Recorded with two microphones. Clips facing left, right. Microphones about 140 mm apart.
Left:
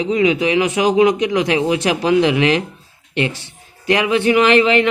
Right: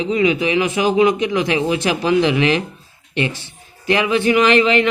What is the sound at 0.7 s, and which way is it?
Speech, 20° left (ahead or behind).